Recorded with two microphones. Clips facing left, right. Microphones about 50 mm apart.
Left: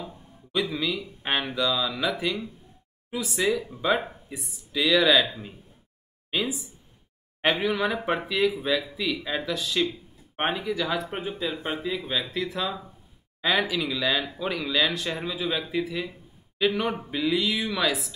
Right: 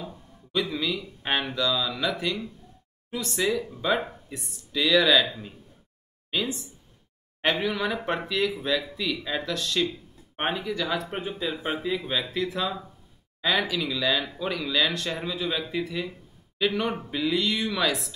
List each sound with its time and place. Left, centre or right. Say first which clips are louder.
0.0 s speech: even; centre